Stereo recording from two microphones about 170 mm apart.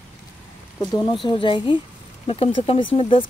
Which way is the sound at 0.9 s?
25° left (ahead or behind).